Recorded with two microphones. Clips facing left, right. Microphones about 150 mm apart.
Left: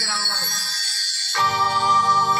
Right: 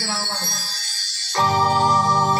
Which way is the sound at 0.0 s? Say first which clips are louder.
Right 3 dB; 40° right (ahead or behind).